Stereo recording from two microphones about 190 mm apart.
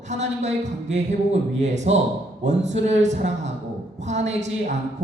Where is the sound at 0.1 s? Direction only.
40° right (ahead or behind).